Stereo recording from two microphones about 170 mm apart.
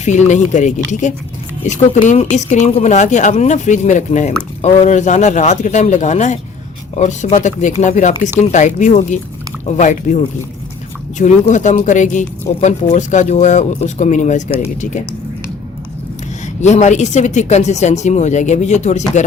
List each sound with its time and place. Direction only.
0.0 s speech: 45° left (ahead or behind)
16.6 s speech: 45° left (ahead or behind)